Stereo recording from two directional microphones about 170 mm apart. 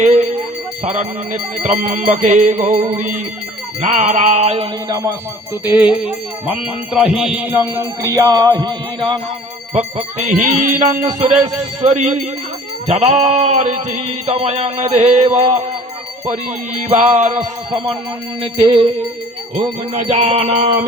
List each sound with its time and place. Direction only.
0.0 s speech: 45° right (ahead or behind)
0.9 s music: 45° right (ahead or behind)
4.9 s music: 20° right (ahead or behind)
9.7 s music: 45° right (ahead or behind)
18.6 s music: 30° right (ahead or behind)